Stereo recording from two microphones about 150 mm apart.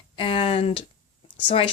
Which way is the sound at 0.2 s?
35° left (ahead or behind).